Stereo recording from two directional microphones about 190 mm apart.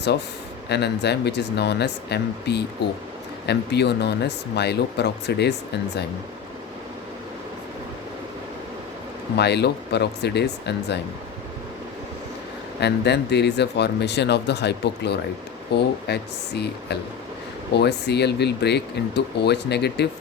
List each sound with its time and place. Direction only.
0.7 s speech: 60° left (ahead or behind)
9.4 s speech: 60° left (ahead or behind)
12.8 s speech: 60° left (ahead or behind)